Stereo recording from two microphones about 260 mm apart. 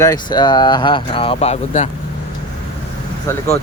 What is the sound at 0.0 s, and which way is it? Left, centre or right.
Speech, centre.